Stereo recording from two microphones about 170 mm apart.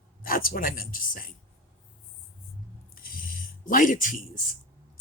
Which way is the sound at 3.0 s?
55° left (ahead or behind).